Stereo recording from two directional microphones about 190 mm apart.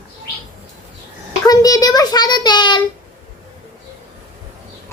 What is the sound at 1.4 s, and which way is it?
A child's voice, 20° left (ahead or behind).